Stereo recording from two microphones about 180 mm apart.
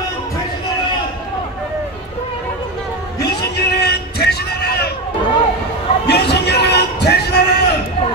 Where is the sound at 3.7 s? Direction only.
65° left (ahead or behind).